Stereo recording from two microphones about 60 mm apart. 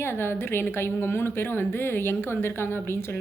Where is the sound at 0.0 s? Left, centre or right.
Left.